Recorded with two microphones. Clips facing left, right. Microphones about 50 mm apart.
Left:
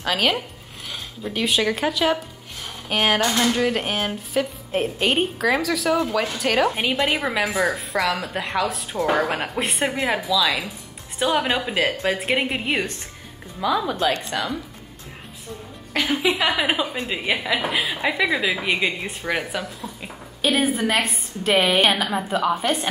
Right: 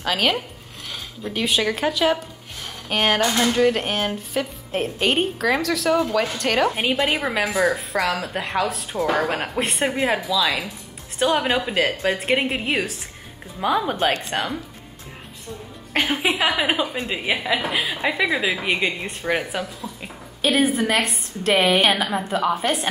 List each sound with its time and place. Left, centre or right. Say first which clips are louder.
0.0 s a woman's voice: even; centre
13.8 s a woman's voice: right 1 dB; right
15.9 s a woman's voice: right 1 dB; right
16.3 s a woman's voice: left 1 dB; centre